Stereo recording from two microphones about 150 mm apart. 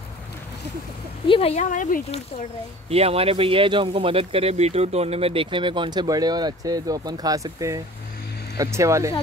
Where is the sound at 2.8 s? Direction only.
40° right (ahead or behind); by 9.2 s 20° right (ahead or behind).